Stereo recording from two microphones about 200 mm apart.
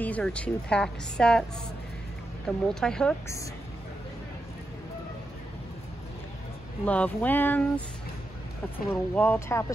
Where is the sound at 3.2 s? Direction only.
15° left (ahead or behind).